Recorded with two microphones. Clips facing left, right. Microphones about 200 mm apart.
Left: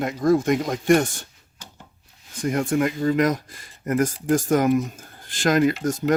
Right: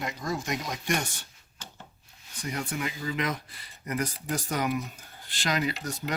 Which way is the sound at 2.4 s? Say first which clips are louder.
Left 11 dB; 50° left (ahead or behind).